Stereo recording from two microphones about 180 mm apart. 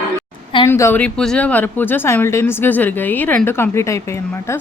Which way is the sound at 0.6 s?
15° left (ahead or behind).